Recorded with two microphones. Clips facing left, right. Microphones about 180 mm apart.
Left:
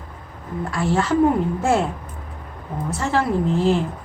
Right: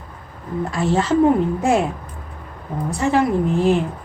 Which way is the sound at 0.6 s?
20° right (ahead or behind).